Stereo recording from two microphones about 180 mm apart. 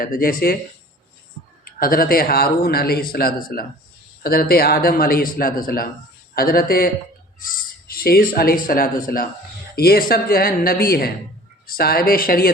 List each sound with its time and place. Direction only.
0.0 s speech: 50° left (ahead or behind)
1.6 s speech: 55° left (ahead or behind)